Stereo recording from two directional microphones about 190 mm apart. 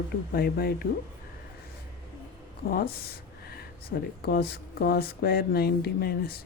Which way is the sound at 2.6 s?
50° left (ahead or behind).